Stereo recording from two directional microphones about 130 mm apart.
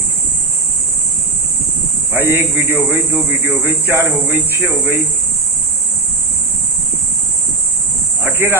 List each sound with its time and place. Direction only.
2.1 s a man's voice: 15° right (ahead or behind)
8.2 s cricket: 15° right (ahead or behind)